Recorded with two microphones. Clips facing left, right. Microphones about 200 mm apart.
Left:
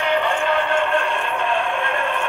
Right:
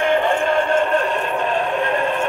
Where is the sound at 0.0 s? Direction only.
45° right (ahead or behind).